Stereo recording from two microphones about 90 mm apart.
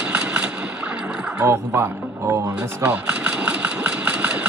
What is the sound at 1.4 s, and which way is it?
Speech, 35° right (ahead or behind).